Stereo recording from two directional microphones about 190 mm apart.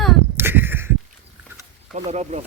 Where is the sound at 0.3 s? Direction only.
10° right (ahead or behind).